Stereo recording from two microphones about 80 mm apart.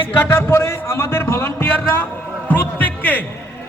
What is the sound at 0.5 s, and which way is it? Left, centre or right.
A man's voice, left.